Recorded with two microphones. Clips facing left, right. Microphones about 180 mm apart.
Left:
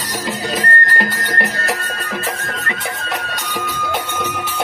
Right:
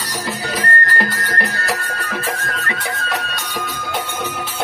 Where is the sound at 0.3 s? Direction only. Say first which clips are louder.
Left 2 dB; 20° left (ahead or behind).